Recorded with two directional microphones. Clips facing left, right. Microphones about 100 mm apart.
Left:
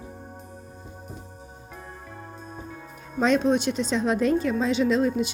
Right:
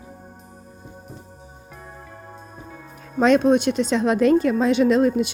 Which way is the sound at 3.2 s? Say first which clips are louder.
Right 5 dB; 60° right (ahead or behind).